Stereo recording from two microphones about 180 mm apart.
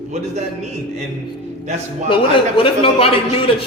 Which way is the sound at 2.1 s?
30° left (ahead or behind).